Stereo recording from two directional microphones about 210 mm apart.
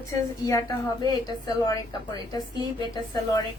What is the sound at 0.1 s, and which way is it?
A woman's voice, 15° left (ahead or behind).